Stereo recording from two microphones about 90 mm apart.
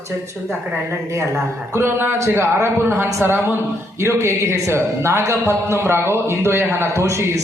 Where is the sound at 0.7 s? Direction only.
30° right (ahead or behind).